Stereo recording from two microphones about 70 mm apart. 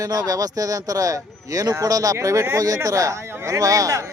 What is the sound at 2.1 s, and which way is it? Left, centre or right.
Speech, right.